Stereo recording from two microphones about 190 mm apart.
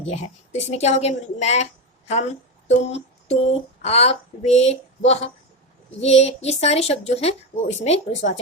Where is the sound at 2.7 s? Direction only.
35° left (ahead or behind).